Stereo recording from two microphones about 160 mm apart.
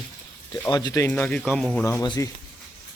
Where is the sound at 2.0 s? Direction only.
25° left (ahead or behind).